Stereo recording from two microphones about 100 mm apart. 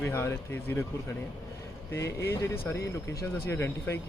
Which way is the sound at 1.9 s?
25° left (ahead or behind).